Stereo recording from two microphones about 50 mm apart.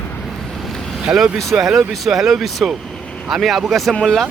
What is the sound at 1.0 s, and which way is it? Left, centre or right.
Speech, centre.